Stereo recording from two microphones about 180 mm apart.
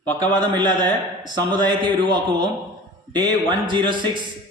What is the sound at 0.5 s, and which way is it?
A man's voice, 25° right (ahead or behind).